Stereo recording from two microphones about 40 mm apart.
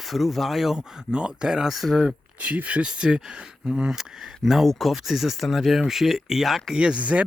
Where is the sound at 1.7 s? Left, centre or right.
Centre.